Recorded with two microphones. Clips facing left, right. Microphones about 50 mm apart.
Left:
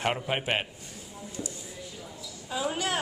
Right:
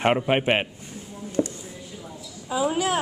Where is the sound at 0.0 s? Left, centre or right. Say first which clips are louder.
Right 8 dB; right.